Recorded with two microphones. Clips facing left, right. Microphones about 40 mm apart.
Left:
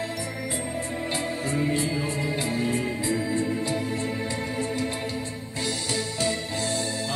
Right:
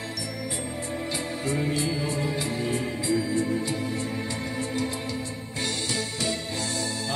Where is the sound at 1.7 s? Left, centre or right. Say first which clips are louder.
Left 1 dB; left.